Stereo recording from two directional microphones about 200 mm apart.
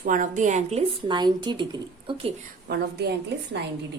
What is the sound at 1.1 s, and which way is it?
Speech, 20° right (ahead or behind).